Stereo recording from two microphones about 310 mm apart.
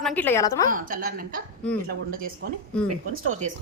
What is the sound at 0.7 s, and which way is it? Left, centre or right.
A woman's voice, right.